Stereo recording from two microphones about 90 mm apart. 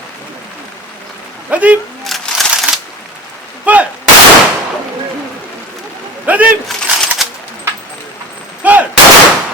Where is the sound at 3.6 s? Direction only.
15° right (ahead or behind).